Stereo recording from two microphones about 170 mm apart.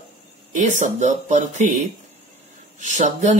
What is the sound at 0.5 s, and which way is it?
Speech, 45° right (ahead or behind).